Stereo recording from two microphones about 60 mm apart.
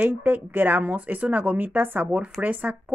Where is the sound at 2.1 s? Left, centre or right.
Right.